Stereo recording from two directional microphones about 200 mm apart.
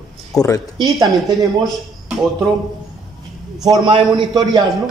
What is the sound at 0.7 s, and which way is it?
Speech, 20° right (ahead or behind).